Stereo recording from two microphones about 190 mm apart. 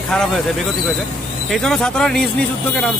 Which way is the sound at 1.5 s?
Centre (ahead or behind).